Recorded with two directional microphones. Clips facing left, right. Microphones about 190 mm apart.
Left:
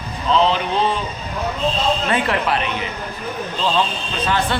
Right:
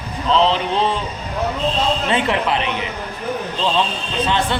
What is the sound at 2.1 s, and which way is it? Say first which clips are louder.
Speech: right 1 dB; 20° right (ahead or behind).